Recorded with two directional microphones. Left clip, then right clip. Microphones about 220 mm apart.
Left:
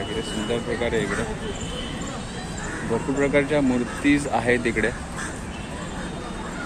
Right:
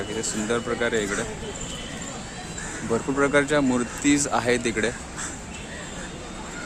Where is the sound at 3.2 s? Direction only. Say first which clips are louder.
Even; 25° right (ahead or behind).